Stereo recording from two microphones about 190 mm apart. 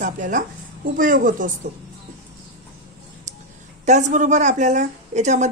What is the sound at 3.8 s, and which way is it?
Speech, 40° right (ahead or behind).